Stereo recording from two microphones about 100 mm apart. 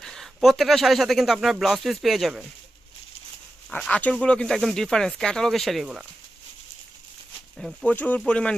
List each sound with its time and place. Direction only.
0.0 s a sound: 5° left (ahead or behind)
0.3 s speech: centre (ahead or behind)
3.7 s speech: 10° left (ahead or behind)
7.9 s speech: 15° left (ahead or behind)